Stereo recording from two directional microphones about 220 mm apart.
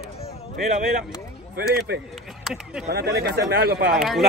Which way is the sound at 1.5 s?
45° right (ahead or behind).